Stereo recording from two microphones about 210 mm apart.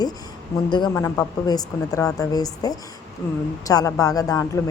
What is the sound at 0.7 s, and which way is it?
A woman's voice, 20° left (ahead or behind).